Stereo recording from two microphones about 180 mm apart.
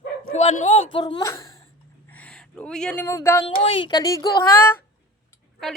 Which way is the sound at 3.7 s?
25° left (ahead or behind).